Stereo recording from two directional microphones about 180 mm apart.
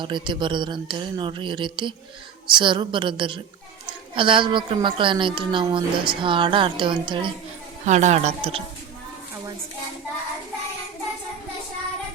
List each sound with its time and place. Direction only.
0.0 s a woman's voice: 25° right (ahead or behind)
7.9 s speech: 40° right (ahead or behind)